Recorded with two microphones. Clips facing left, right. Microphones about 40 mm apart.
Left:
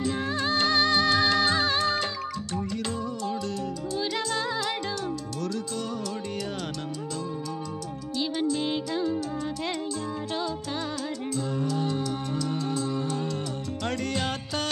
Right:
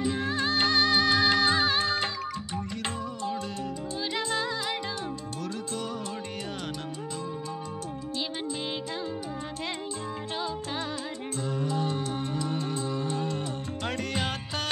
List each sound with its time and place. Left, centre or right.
0.2 s music of bollywood: centre
1.3 s music: centre
4.1 s music: right
10.3 s music: centre
14.1 s music: centre